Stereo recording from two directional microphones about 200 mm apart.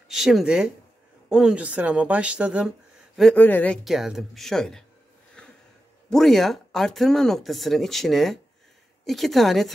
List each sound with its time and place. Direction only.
0.1 s speech: centre (ahead or behind)
3.2 s speech: 5° left (ahead or behind)
6.0 s speech: centre (ahead or behind)